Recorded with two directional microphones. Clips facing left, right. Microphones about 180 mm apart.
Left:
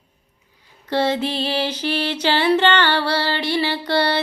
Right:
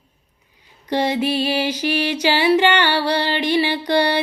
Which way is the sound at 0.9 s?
15° right (ahead or behind).